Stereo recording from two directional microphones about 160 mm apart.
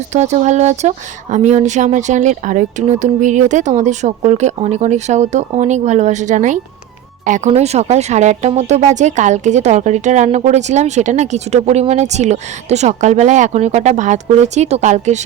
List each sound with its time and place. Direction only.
0.1 s speech: 45° right (ahead or behind)